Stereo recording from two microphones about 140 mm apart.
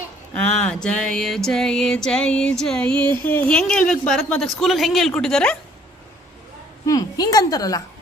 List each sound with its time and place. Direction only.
0.3 s music: 5° left (ahead or behind)
3.2 s speech: 15° left (ahead or behind)
4.4 s music: centre (ahead or behind)
6.9 s a woman's voice: 25° left (ahead or behind)